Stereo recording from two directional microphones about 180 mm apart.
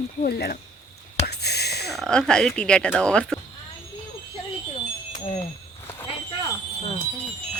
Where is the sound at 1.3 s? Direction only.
65° left (ahead or behind).